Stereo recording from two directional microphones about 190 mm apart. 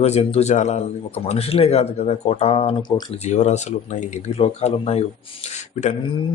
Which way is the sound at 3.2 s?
35° left (ahead or behind).